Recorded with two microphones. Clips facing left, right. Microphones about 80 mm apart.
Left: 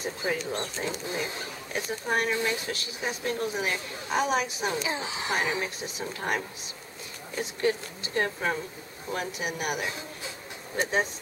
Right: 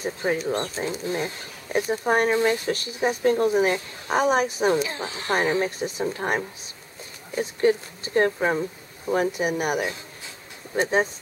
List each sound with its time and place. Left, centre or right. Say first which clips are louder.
0.2 s speech: right 5 dB; right
0.8 s speech: right 5 dB; right
4.8 s speech: even; centre
5.3 s speech: right 7 dB; right
7.6 s speech: right 7 dB; right
9.1 s speech: right 9 dB; right